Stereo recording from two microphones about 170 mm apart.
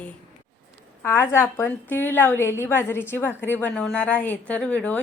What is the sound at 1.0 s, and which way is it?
A woman's voice, 15° left (ahead or behind).